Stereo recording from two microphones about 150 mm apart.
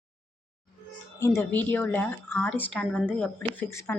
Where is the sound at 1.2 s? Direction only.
15° left (ahead or behind).